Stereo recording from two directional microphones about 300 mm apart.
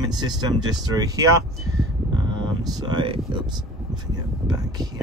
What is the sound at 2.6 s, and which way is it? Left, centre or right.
Speech, centre.